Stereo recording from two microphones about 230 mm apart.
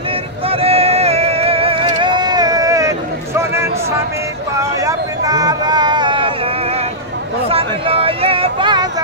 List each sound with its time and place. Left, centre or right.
0.5 s music: right
4.7 s a sound: centre
7.4 s speech: right